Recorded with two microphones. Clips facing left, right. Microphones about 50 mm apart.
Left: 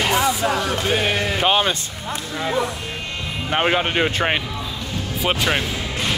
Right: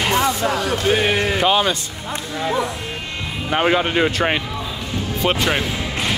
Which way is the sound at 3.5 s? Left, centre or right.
Centre.